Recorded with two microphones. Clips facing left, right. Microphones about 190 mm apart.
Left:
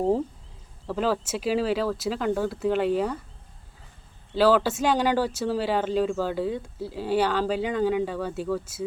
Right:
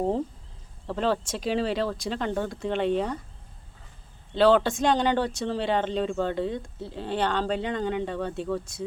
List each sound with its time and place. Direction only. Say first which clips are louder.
0.9 s speech: left 1 dB; 5° left (ahead or behind)
4.4 s speech: even; 5° left (ahead or behind)